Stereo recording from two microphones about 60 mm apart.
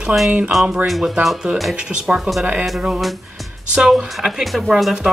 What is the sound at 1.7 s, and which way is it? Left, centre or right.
Speech, centre.